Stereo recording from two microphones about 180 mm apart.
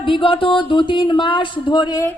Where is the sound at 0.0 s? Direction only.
30° left (ahead or behind).